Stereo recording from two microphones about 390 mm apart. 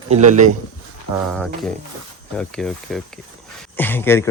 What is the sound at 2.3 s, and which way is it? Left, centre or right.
Speech, centre.